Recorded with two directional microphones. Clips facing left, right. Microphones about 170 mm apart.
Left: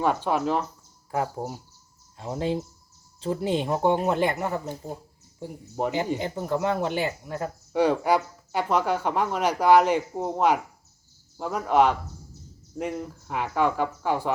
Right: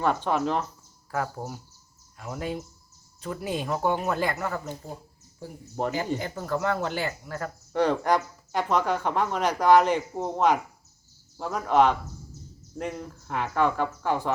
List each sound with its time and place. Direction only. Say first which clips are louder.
0.0 s speech: left 1 dB; 10° left (ahead or behind)
1.1 s speech: left 3 dB; 20° left (ahead or behind)